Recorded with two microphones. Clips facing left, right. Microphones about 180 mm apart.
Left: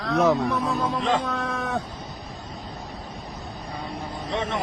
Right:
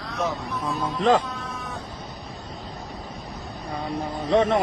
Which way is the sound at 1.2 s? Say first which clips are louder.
Left 6 dB; 75° left (ahead or behind).